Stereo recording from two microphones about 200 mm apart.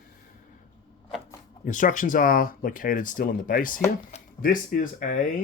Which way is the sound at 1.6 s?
40° left (ahead or behind).